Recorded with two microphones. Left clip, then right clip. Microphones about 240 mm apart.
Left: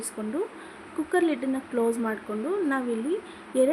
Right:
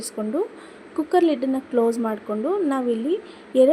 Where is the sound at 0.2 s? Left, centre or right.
Centre.